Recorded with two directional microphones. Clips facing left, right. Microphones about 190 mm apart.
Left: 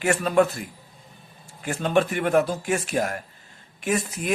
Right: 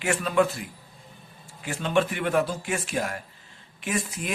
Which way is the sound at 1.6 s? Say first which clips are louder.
Left 3 dB; 45° left (ahead or behind).